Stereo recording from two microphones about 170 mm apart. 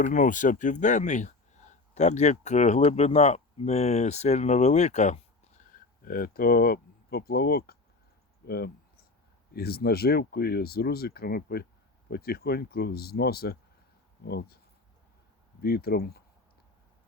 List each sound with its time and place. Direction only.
0.0 s speech: 50° left (ahead or behind); by 7.8 s 65° left (ahead or behind)
8.4 s a sound: 65° left (ahead or behind)
9.5 s speech: 65° left (ahead or behind)
15.6 s speech: 65° left (ahead or behind)